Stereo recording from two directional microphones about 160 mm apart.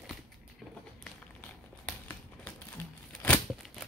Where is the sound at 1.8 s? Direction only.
10° left (ahead or behind).